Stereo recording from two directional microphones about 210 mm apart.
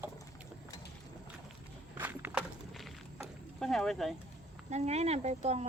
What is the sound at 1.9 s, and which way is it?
Walk, 10° right (ahead or behind).